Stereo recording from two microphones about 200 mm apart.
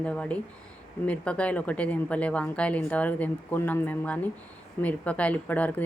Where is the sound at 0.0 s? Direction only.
5° left (ahead or behind).